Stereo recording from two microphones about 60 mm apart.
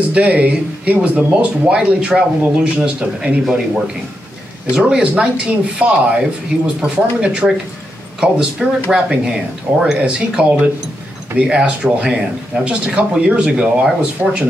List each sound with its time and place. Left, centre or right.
0.1 s speech: right